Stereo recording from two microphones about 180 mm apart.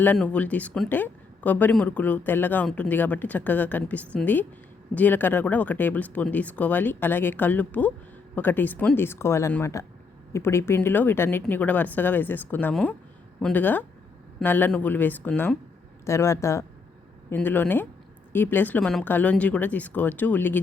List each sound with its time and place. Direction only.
0.0 s speech: 10° left (ahead or behind)